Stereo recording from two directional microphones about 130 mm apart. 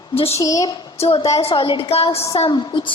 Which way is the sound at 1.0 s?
50° left (ahead or behind).